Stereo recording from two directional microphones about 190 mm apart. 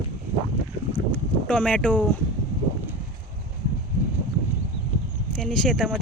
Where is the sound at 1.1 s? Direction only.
5° left (ahead or behind).